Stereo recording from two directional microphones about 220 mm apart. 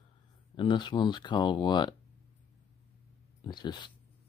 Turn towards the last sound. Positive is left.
turn(degrees=20)  # may be behind; listen again after turning